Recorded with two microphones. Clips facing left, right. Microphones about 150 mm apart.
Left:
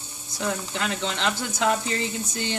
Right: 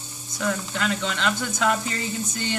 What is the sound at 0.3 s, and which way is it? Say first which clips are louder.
Speech: right 1 dB; 25° left (ahead or behind).